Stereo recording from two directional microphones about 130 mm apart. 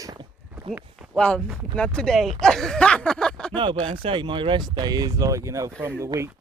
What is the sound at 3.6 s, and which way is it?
Speech, 40° right (ahead or behind).